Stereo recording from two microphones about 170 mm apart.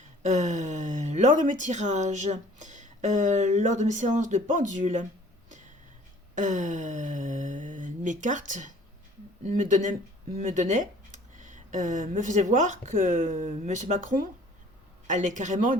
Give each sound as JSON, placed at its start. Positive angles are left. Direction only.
{"t": 0.2, "sound": "speech", "side_deg": -45}
{"t": 6.3, "sound": "a sound", "side_deg": -45}
{"t": 9.4, "sound": "speech", "side_deg": -45}